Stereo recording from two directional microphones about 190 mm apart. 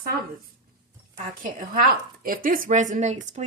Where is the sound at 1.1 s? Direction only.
45° right (ahead or behind).